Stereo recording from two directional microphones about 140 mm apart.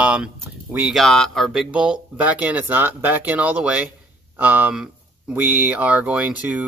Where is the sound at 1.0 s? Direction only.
5° left (ahead or behind).